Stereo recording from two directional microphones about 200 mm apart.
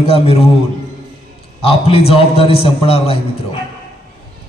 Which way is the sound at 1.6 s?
30° left (ahead or behind).